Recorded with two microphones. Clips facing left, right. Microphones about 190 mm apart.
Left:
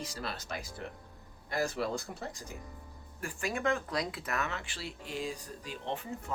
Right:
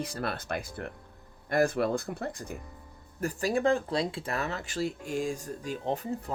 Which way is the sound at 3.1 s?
40° right (ahead or behind).